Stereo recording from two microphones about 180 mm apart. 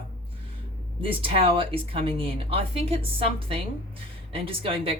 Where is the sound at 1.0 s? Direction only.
30° right (ahead or behind).